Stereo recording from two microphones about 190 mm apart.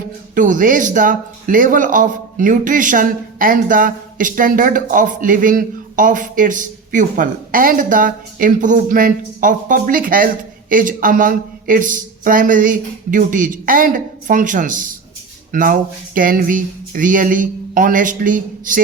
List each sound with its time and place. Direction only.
0.3 s speech: 45° right (ahead or behind)